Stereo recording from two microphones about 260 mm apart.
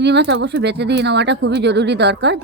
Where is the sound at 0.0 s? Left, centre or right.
Right.